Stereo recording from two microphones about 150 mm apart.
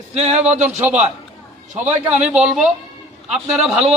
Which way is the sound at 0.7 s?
10° right (ahead or behind).